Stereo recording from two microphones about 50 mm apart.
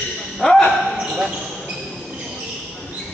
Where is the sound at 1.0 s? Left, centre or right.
Centre.